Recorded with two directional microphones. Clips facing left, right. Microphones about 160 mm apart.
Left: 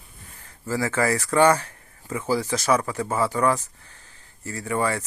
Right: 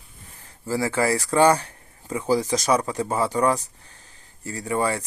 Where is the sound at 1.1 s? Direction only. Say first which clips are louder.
Even; 30° right (ahead or behind).